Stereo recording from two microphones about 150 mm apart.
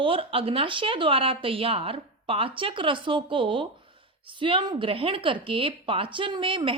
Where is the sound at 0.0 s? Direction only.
35° right (ahead or behind).